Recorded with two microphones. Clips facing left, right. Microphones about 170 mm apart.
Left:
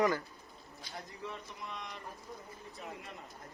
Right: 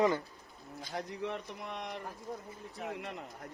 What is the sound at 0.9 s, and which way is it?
Speech, 70° right (ahead or behind).